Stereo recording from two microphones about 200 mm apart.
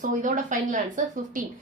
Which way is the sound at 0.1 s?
40° right (ahead or behind).